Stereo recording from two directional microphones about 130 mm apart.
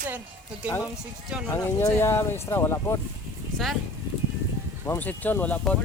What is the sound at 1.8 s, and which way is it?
Speech, 20° left (ahead or behind).